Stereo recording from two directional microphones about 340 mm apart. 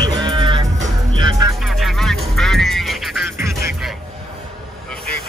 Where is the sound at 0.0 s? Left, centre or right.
Centre.